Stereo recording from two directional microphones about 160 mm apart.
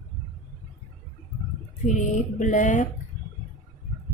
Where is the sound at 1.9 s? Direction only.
50° left (ahead or behind).